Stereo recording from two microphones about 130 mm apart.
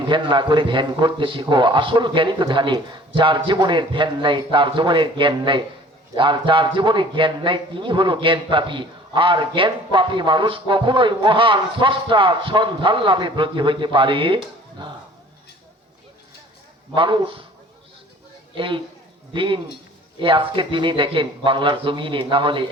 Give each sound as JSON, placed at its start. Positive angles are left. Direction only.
{"t": 0.1, "sound": "speech", "side_deg": -35}
{"t": 16.9, "sound": "speech", "side_deg": -40}
{"t": 18.5, "sound": "speech", "side_deg": -40}